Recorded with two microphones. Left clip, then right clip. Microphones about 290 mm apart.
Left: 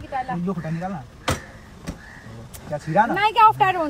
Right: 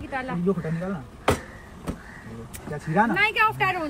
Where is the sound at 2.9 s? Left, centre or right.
Centre.